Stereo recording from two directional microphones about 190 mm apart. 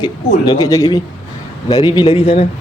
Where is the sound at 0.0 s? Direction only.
20° left (ahead or behind).